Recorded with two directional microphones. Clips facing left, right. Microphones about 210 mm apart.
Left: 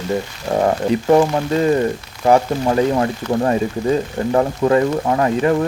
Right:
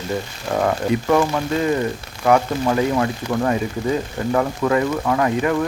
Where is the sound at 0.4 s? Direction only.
25° left (ahead or behind).